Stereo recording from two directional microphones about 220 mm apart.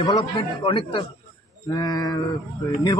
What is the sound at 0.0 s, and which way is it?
Speech, 20° left (ahead or behind).